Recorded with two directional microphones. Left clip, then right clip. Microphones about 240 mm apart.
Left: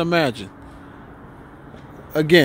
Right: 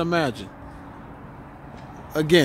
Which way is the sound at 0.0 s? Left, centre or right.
Centre.